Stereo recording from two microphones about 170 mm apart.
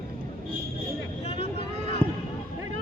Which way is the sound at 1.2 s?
35° left (ahead or behind).